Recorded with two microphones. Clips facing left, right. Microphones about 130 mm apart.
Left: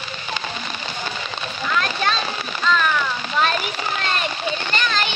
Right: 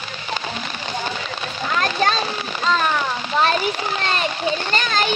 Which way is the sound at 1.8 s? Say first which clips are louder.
Right 3 dB; 40° right (ahead or behind).